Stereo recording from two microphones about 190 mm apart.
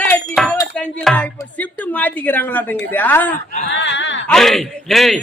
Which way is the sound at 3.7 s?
70° left (ahead or behind).